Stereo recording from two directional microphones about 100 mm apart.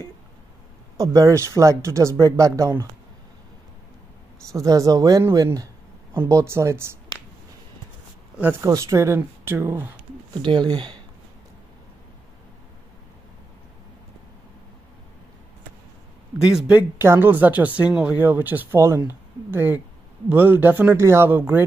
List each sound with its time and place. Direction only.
0.9 s speech: 35° right (ahead or behind)
4.5 s speech: 35° right (ahead or behind)
8.4 s speech: 20° right (ahead or behind)
8.6 s speech: 30° right (ahead or behind)
10.3 s speech: 50° right (ahead or behind)
16.4 s speech: 10° right (ahead or behind)
17.0 s speech: 20° right (ahead or behind)